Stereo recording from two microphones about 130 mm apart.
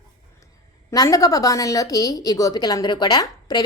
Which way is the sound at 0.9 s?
25° left (ahead or behind).